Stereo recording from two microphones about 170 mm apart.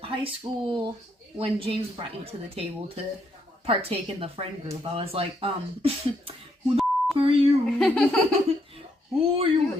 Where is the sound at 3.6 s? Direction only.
35° right (ahead or behind).